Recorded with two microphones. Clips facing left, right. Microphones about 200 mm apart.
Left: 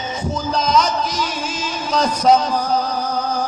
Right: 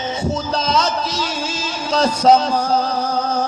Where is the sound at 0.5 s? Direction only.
30° right (ahead or behind).